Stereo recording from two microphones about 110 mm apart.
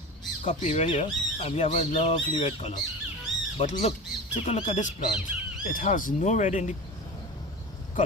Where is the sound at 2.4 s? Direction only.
75° left (ahead or behind).